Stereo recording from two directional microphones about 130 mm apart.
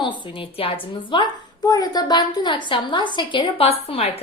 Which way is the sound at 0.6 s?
40° left (ahead or behind).